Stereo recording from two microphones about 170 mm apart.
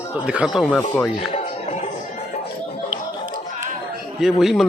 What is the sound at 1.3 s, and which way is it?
Music, 40° left (ahead or behind).